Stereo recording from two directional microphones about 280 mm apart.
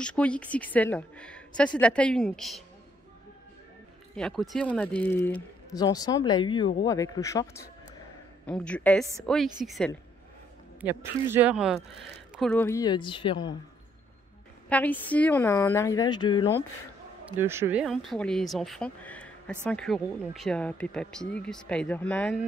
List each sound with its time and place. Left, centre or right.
0.0 s speech: centre
4.2 s speech: centre
8.5 s speech: centre
14.7 s speech: centre
17.3 s speech: centre